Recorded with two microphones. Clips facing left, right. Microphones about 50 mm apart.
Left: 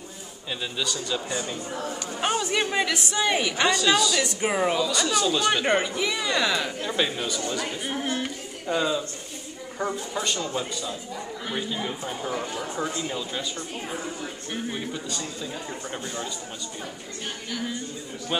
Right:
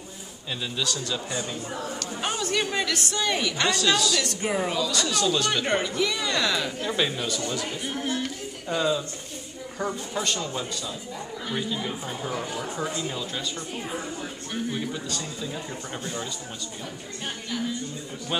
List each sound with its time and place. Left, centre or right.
0.7 s a woman's voice: centre
3.7 s a woman's voice: centre
7.9 s speech: centre
8.6 s a woman's voice: centre
14.5 s a woman's voice: centre
18.3 s speech: centre